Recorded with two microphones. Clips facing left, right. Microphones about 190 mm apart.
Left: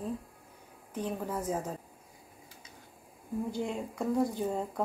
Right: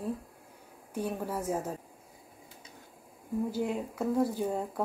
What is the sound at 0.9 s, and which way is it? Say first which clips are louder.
Speech: right 1 dB; 10° right (ahead or behind).